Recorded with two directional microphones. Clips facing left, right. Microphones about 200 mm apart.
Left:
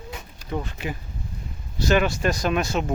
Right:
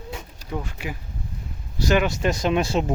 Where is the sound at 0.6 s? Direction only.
10° right (ahead or behind); by 2.8 s 30° right (ahead or behind).